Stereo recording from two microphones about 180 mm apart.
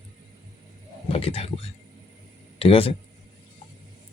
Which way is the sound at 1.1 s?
35° left (ahead or behind).